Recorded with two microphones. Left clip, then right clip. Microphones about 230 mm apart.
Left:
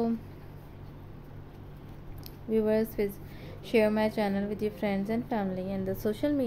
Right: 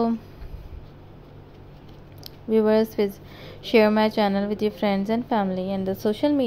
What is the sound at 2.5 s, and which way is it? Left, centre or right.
A woman's voice, centre.